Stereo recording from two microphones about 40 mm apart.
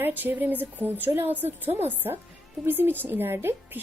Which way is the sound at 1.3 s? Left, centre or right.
Right.